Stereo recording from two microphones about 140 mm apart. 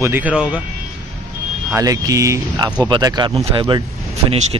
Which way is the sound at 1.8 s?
25° right (ahead or behind).